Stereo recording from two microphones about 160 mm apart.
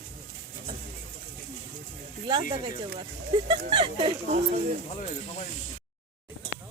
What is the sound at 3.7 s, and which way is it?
Speech, 30° right (ahead or behind).